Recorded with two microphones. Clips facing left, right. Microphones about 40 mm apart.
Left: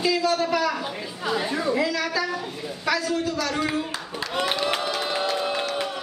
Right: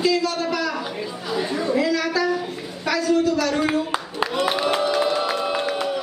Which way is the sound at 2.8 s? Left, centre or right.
Centre.